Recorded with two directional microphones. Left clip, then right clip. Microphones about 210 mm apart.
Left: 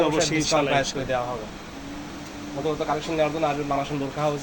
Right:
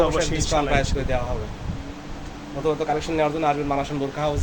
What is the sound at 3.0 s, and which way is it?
Speech, 20° right (ahead or behind).